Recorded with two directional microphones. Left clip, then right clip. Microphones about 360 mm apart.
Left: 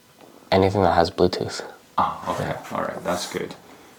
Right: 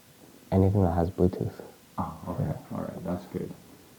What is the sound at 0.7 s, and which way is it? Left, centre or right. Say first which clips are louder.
Speech: left 10 dB; centre.